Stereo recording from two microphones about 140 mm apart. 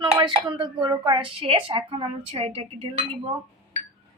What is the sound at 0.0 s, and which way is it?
A woman's voice, 30° right (ahead or behind).